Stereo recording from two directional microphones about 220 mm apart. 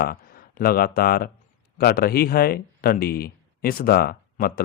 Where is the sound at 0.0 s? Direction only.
40° left (ahead or behind).